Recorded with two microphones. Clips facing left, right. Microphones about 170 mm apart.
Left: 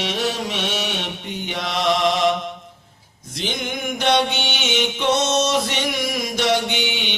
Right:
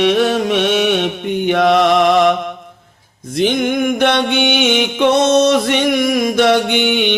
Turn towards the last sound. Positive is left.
turn(degrees=-55)  # may be behind; listen again after turning